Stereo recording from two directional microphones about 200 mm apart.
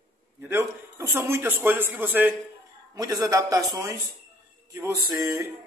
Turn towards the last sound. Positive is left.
turn(degrees=-15)  # may be behind; listen again after turning